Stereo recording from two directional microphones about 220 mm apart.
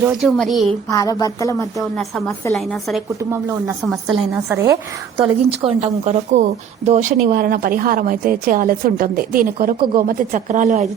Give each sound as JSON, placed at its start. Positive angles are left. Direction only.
{"t": 0.0, "sound": "a woman's voice", "side_deg": 0}
{"t": 0.9, "sound": "speech", "side_deg": 15}
{"t": 1.8, "sound": "a woman's voice", "side_deg": 0}
{"t": 3.3, "sound": "a woman's voice", "side_deg": -10}
{"t": 5.5, "sound": "speech", "side_deg": -25}
{"t": 7.1, "sound": "a woman's voice", "side_deg": -40}